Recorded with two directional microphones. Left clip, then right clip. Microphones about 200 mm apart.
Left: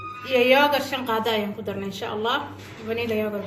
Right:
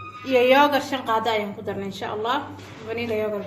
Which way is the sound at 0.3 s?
45° right (ahead or behind).